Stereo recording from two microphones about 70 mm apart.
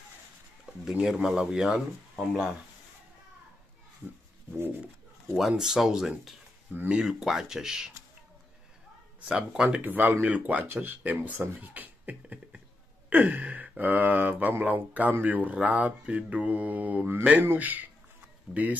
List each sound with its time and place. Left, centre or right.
0.7 s a sound: centre
1.0 s speech: centre
5.6 s speech: centre
9.3 s speech: centre
9.8 s speech: right